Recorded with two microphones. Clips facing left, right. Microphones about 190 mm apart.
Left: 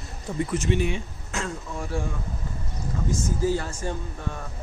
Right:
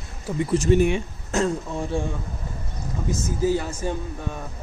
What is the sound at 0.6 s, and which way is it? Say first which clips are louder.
Speech: right 6 dB; 45° right (ahead or behind).